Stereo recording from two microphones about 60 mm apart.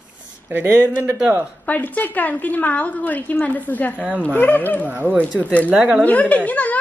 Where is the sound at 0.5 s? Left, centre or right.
Right.